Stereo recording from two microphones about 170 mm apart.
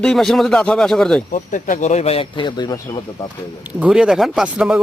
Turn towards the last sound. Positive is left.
turn(degrees=-5)  # may be behind; listen again after turning